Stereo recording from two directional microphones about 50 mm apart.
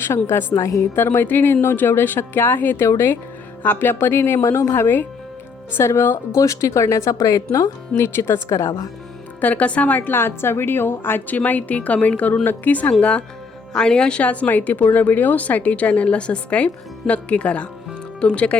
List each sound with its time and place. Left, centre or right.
0.5 s a woman's voice: left
0.9 s a woman's voice: left
5.7 s a woman's voice: left
7.5 s speech: left
9.4 s a woman's voice: left
11.3 s a woman's voice: left
13.0 s a woman's voice: left
14.2 s a woman's voice: left